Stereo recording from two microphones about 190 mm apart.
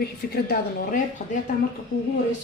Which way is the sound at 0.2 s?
50° left (ahead or behind).